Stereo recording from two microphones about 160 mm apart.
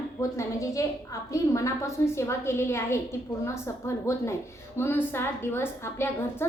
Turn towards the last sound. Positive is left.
turn(degrees=15)  # may be behind; listen again after turning